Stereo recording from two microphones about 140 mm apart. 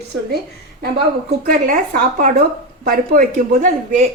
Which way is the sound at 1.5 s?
85° right.